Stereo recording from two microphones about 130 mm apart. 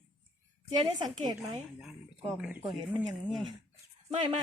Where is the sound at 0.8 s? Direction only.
35° right (ahead or behind).